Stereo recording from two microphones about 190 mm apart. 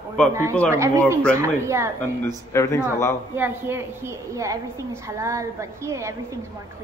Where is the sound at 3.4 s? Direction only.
15° right (ahead or behind).